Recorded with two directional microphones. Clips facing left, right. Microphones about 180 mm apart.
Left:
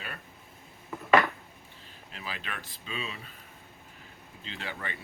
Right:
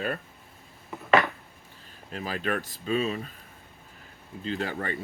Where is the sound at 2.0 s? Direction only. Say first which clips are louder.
Right 11 dB; 45° right (ahead or behind).